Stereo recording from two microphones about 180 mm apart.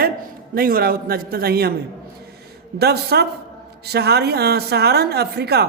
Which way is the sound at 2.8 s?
60° right (ahead or behind).